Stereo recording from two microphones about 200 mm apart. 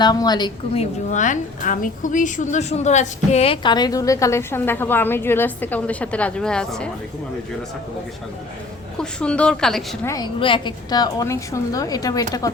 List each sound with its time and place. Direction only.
0.0 s a woman's voice: 20° left (ahead or behind); by 6.9 s 5° left (ahead or behind)
9.0 s a woman's voice: 5° left (ahead or behind)
10.1 s a woman's voice: 20° left (ahead or behind)